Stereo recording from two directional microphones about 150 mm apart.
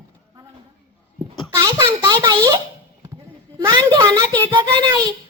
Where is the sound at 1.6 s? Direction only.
25° right (ahead or behind).